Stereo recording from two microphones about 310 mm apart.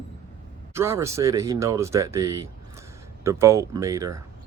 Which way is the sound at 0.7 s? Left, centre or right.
Centre.